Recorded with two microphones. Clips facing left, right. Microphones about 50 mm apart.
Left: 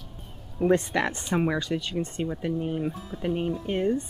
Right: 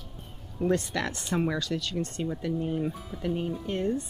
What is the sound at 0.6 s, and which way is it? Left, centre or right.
Speech, left.